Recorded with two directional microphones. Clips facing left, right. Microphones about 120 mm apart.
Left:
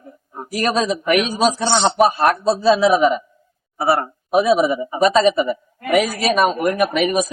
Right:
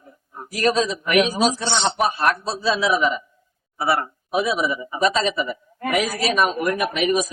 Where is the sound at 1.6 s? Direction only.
40° left (ahead or behind).